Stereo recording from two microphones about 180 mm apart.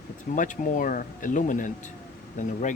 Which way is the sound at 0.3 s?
45° left (ahead or behind).